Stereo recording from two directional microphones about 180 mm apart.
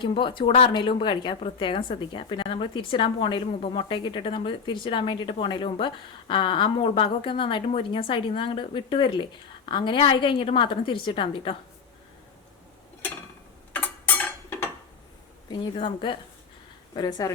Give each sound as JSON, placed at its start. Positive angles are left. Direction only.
{"t": 0.0, "sound": "speech", "side_deg": 30}
{"t": 13.7, "sound": "a sound", "side_deg": 10}
{"t": 15.4, "sound": "speech", "side_deg": 25}